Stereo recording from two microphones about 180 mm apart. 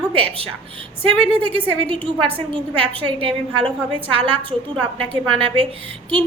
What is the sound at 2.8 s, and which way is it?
A woman's voice, 30° right (ahead or behind).